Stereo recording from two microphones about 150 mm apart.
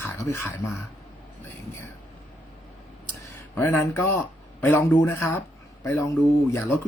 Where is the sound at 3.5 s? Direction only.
15° left (ahead or behind).